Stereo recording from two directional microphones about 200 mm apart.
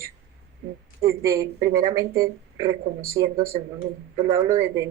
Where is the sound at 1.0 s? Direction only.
15° right (ahead or behind).